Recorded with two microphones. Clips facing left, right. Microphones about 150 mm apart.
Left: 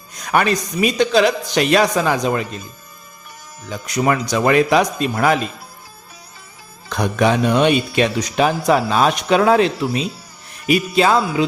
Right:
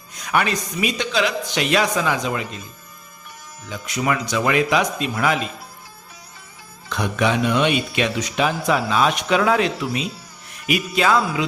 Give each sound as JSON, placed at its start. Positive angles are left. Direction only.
{"t": 0.3, "sound": "speech", "side_deg": 40}
{"t": 3.7, "sound": "speech", "side_deg": 40}
{"t": 6.8, "sound": "speech", "side_deg": 40}